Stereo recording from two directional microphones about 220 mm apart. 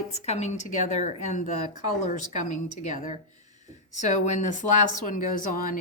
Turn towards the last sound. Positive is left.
turn(degrees=40)  # may be behind; listen again after turning